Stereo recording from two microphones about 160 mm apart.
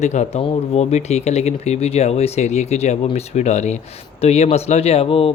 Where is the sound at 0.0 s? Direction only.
45° left (ahead or behind).